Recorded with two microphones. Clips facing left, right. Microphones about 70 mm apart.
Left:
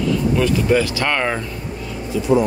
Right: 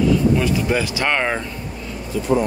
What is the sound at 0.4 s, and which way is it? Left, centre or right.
Speech, centre.